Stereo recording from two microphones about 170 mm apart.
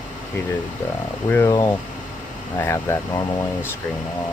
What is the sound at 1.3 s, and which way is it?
Speech, 20° left (ahead or behind).